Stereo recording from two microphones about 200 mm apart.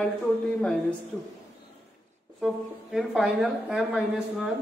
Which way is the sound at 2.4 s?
Centre (ahead or behind).